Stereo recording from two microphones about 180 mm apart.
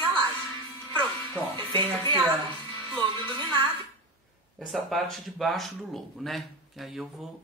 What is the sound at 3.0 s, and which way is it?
Music, 30° right (ahead or behind).